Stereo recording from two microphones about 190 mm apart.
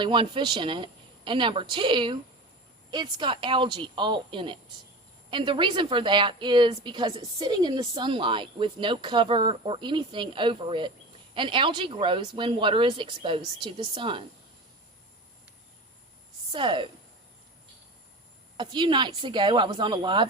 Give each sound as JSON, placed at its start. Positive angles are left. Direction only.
{"t": 0.0, "sound": "a woman's voice", "side_deg": -25}
{"t": 16.5, "sound": "speech", "side_deg": -25}
{"t": 18.5, "sound": "a woman's voice", "side_deg": -25}